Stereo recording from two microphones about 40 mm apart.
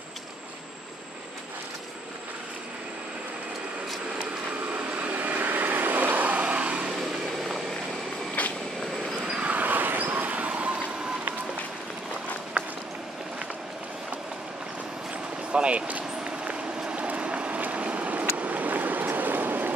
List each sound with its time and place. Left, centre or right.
4.7 s vehicle: right
7.0 s vehicle: centre
8.4 s vehicle: left
9.5 s vehicle: right
15.5 s a sound: right
17.6 s vehicle: right
18.4 s stream: right